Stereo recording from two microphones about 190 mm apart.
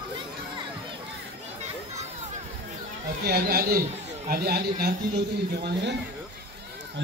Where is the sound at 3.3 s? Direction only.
55° right (ahead or behind).